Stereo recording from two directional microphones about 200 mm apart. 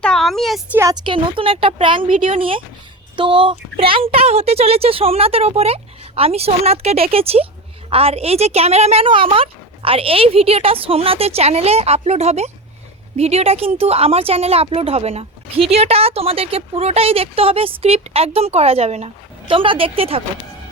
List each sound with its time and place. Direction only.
0.0 s speech: centre (ahead or behind)
0.8 s speech: 20° right (ahead or behind)